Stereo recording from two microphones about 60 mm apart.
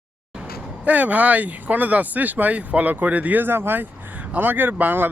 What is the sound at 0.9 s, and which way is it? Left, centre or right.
Speech, right.